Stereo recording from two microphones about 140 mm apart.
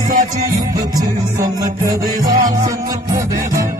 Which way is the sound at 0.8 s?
25° right (ahead or behind).